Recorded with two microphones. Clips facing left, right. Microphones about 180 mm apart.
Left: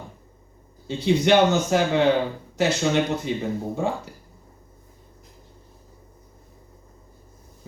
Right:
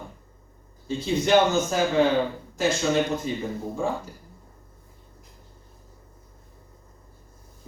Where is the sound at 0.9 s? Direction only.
70° left (ahead or behind).